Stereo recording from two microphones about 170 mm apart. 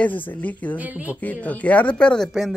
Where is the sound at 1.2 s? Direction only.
10° left (ahead or behind).